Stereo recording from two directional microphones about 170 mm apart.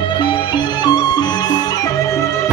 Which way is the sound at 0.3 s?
25° left (ahead or behind).